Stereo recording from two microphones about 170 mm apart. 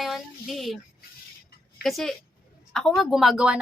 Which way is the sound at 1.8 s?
Centre (ahead or behind).